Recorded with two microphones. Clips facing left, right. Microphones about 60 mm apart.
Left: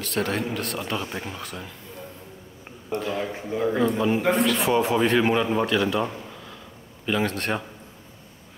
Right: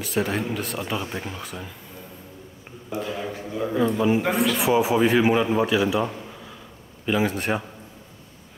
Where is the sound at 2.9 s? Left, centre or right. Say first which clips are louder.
Left 2 dB; centre.